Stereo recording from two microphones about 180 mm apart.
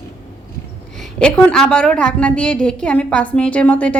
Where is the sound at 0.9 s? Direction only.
5° left (ahead or behind).